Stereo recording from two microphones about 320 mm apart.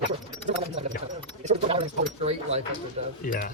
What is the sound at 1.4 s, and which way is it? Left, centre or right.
Speech, centre.